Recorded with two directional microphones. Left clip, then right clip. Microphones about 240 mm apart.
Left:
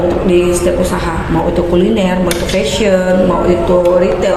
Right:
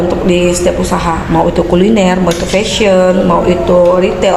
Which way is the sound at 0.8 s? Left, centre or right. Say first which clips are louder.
Right 2 dB; right.